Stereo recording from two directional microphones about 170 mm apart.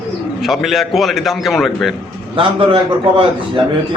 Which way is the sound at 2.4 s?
30° right (ahead or behind).